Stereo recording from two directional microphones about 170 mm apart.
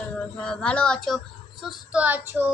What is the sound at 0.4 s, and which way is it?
A child's voice, 5° left (ahead or behind).